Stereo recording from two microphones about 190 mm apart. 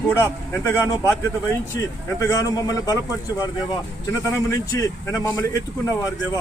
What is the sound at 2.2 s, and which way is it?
Speech, 15° left (ahead or behind).